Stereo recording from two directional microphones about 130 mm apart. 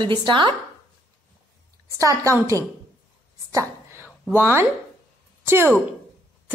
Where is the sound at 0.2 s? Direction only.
35° right (ahead or behind).